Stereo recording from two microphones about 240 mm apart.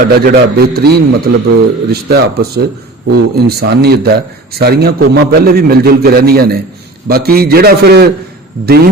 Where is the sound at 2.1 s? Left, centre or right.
Right.